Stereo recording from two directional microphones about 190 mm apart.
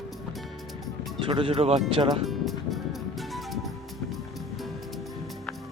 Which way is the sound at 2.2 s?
Centre (ahead or behind).